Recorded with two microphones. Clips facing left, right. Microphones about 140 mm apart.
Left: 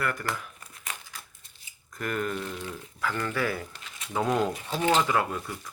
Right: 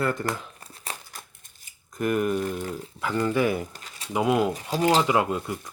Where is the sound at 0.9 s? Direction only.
35° right (ahead or behind).